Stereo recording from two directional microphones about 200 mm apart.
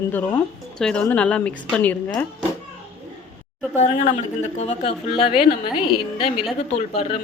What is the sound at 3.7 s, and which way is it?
A woman's voice, 35° left (ahead or behind).